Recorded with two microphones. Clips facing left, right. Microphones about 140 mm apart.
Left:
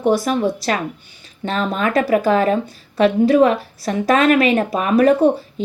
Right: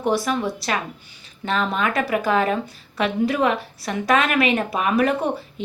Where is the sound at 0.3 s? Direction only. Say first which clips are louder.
Left 5 dB; 35° left (ahead or behind).